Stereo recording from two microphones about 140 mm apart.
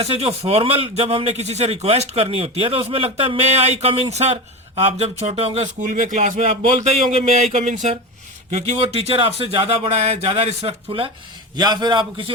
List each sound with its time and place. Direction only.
0.0 s speech: 45° right (ahead or behind)
5.8 s speech: 65° right (ahead or behind); by 11.1 s 40° right (ahead or behind)
11.5 s a man's voice: 30° right (ahead or behind)